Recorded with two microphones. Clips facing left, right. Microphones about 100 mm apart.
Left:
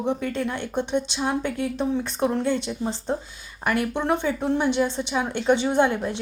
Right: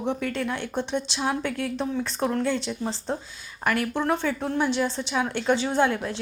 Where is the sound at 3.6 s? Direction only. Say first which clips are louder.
Left 1 dB; centre (ahead or behind).